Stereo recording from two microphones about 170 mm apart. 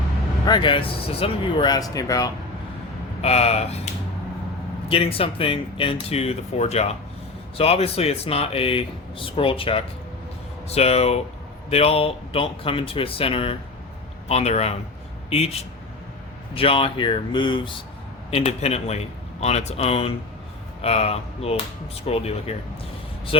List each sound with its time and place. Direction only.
0.4 s speech: 25° left (ahead or behind)
3.2 s speech: 35° left (ahead or behind)
4.9 s speech: 35° left (ahead or behind)